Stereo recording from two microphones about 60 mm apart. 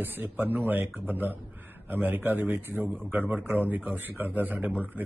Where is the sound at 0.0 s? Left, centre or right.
Right.